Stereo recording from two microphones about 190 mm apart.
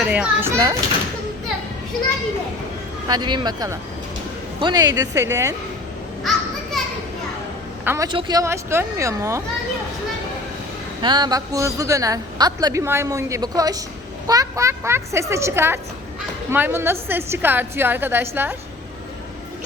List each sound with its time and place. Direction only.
0.0 s a woman's voice: 5° right (ahead or behind)
3.1 s a woman's voice: 25° right (ahead or behind)
7.9 s a woman's voice: 15° right (ahead or behind)
11.0 s a woman's voice: 25° right (ahead or behind)